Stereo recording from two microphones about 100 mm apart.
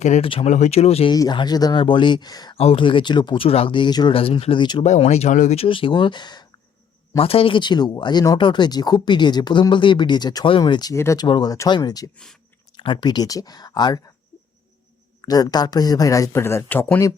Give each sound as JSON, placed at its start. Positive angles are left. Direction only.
{"t": 0.2, "sound": "speech", "side_deg": 75}
{"t": 1.1, "sound": "speech", "side_deg": 45}
{"t": 1.8, "sound": "speech", "side_deg": 55}
{"t": 2.6, "sound": "speech", "side_deg": 90}
{"t": 2.8, "sound": "speech", "side_deg": 50}
{"t": 3.4, "sound": "speech", "side_deg": 70}
{"t": 4.1, "sound": "speech", "side_deg": 70}
{"t": 4.8, "sound": "speech", "side_deg": 90}
{"t": 7.2, "sound": "speech", "side_deg": 70}
{"t": 10.9, "sound": "speech", "side_deg": 25}
{"t": 11.2, "sound": "speech", "side_deg": 45}
{"t": 12.7, "sound": "speech", "side_deg": 55}
{"t": 15.2, "sound": "speech", "side_deg": 40}